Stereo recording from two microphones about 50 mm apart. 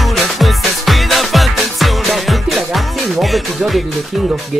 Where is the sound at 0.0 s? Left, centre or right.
Centre.